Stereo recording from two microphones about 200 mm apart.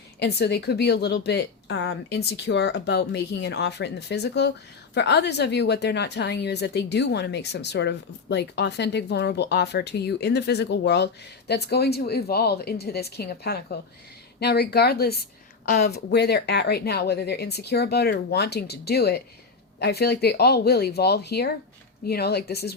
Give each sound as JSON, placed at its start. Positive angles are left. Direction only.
{"t": 0.2, "sound": "a woman's voice", "side_deg": 55}
{"t": 15.6, "sound": "a woman's voice", "side_deg": 40}
{"t": 15.9, "sound": "speech", "side_deg": 55}